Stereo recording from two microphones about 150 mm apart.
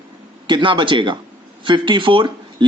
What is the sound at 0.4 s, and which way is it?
Speech, 30° right (ahead or behind).